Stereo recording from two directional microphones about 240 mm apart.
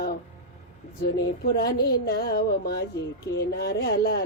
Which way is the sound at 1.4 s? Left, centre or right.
Left.